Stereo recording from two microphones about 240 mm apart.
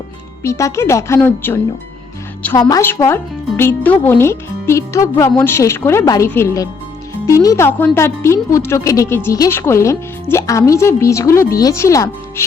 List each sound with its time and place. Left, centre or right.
0.4 s speech: centre